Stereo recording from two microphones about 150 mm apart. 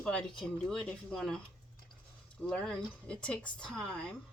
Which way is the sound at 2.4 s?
5° left (ahead or behind).